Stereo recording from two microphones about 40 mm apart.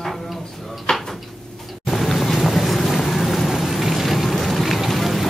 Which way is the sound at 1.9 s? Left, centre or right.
Centre.